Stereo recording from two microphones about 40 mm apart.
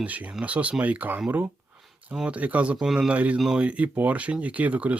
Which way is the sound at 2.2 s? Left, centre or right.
Right.